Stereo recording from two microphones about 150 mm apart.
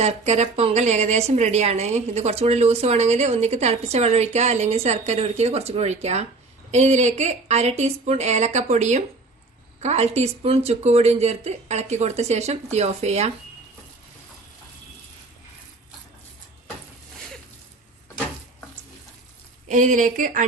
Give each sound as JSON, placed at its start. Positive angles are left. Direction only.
{"t": 0.0, "sound": "a woman's voice", "side_deg": -50}
{"t": 19.6, "sound": "a woman's voice", "side_deg": -55}